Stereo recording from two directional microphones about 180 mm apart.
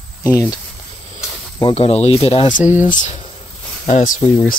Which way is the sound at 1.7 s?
35° left (ahead or behind).